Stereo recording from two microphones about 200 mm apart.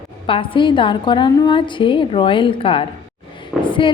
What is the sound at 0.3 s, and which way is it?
A woman's voice, 25° left (ahead or behind).